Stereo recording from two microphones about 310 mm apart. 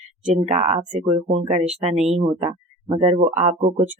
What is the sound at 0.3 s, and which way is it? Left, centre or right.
Speech, right.